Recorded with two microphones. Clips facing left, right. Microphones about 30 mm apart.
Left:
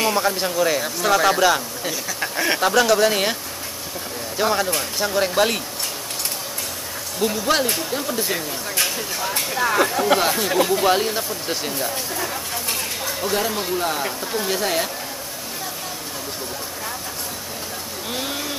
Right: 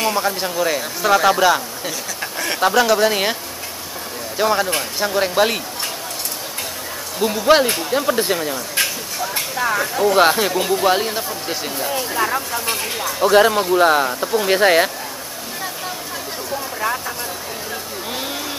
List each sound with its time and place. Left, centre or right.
0.0 s speech: centre
2.3 s a sound: centre
2.6 s speech: centre
4.4 s speech: centre
7.2 s speech: centre
9.3 s vehicle: centre
10.1 s speech: right
10.6 s speech: centre
13.2 s speech: right
18.1 s a sound: centre